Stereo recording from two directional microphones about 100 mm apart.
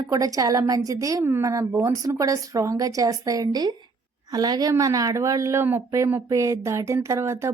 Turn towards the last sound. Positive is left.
turn(degrees=-30)  # may be behind; listen again after turning